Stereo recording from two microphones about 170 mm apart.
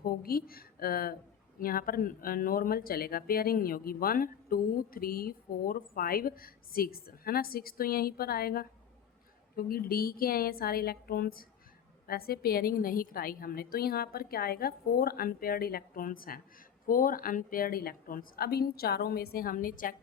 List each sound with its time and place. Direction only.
0.0 s speech: 60° left (ahead or behind)